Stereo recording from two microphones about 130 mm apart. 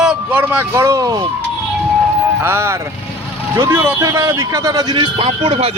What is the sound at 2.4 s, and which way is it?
A man's voice, 20° right (ahead or behind).